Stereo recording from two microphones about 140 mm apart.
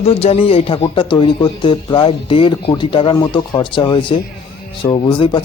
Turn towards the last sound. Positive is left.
turn(degrees=35)  # may be behind; listen again after turning